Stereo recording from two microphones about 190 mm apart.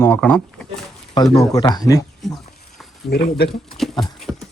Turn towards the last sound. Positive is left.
turn(degrees=0)  # may be behind; listen again after turning